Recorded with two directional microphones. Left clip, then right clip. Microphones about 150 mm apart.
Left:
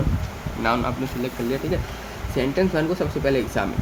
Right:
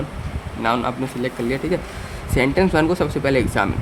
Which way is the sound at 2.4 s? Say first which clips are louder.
Right 5 dB; 55° right (ahead or behind).